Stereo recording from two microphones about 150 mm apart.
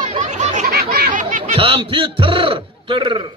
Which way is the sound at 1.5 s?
40° right (ahead or behind).